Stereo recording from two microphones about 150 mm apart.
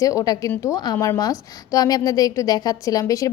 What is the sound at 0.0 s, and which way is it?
A woman's voice, 20° left (ahead or behind).